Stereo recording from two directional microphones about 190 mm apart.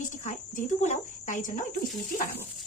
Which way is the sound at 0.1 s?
40° left (ahead or behind).